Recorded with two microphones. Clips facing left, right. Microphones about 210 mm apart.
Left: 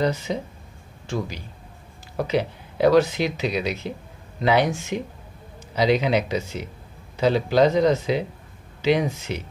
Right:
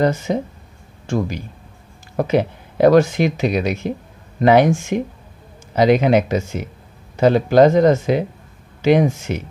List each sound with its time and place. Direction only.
0.0 s speech: 50° right (ahead or behind)